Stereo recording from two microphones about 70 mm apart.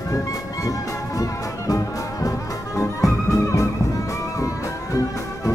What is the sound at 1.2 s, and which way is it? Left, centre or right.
Music, left.